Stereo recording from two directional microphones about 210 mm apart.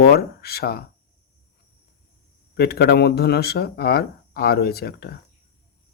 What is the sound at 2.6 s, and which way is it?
Speech, 50° left (ahead or behind).